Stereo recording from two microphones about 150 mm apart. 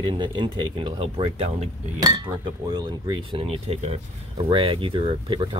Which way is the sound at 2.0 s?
25° right (ahead or behind).